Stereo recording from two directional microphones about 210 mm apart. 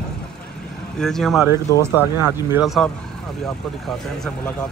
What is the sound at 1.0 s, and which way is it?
Speech, centre (ahead or behind).